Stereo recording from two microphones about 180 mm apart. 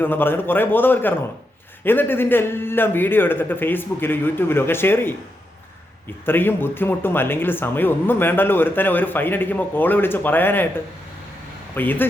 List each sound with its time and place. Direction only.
0.0 s speech: 10° left (ahead or behind)
6.2 s speech: 10° left (ahead or behind)
11.7 s speech: 10° left (ahead or behind)